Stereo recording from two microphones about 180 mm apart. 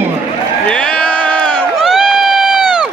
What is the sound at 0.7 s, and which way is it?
Crowd, 5° left (ahead or behind).